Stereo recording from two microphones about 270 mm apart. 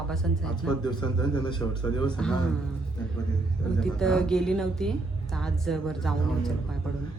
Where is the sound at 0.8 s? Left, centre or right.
Centre.